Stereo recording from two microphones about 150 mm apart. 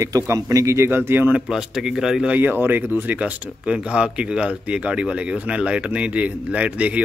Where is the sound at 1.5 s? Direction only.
5° right (ahead or behind).